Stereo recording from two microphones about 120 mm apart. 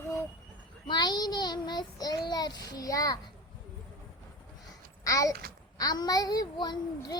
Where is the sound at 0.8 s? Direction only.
35° left (ahead or behind).